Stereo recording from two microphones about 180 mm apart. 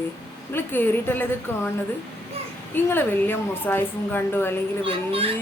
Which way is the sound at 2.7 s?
10° left (ahead or behind).